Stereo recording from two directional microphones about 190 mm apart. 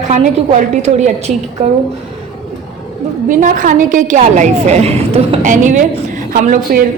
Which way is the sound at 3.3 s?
45° right (ahead or behind).